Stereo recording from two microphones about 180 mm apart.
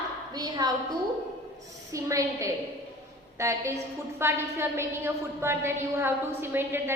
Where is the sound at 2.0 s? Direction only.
15° right (ahead or behind).